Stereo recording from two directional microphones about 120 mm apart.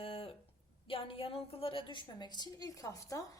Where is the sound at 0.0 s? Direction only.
50° left (ahead or behind).